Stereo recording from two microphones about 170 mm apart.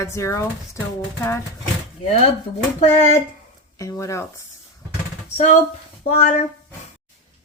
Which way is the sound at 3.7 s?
20° left (ahead or behind).